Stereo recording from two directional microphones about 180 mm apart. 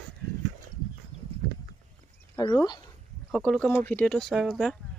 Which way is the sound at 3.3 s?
Centre (ahead or behind).